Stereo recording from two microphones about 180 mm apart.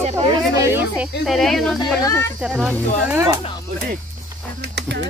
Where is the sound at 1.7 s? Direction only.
20° left (ahead or behind).